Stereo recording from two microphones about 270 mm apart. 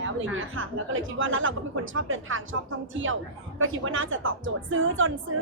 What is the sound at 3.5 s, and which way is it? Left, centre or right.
A woman's voice, right.